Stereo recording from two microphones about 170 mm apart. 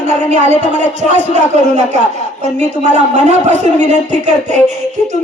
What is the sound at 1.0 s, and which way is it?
Speech, 45° right (ahead or behind).